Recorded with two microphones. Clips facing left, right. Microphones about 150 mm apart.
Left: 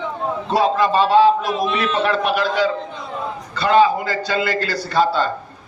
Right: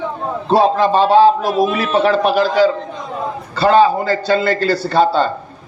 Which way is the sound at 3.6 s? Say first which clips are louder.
Right 3 dB; 35° right (ahead or behind).